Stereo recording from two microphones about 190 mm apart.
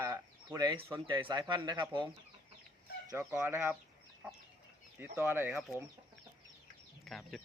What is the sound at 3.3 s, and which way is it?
Speech, 10° right (ahead or behind).